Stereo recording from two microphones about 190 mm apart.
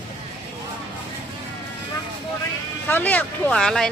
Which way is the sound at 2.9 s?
10° left (ahead or behind).